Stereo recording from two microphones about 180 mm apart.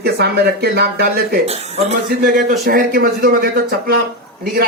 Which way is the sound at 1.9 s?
55° right (ahead or behind).